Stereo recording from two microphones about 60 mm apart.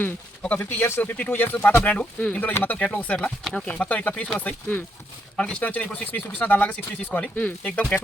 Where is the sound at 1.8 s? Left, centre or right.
Left.